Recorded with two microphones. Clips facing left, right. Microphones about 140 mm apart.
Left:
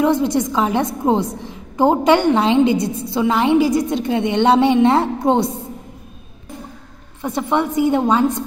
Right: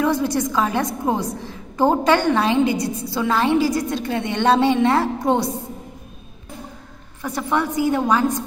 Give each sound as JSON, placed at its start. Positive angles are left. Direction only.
{"t": 0.0, "sound": "a woman's voice", "side_deg": 20}
{"t": 7.2, "sound": "a woman's voice", "side_deg": 25}